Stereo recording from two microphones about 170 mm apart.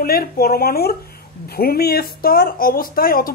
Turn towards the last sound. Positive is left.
turn(degrees=60)  # may be behind; listen again after turning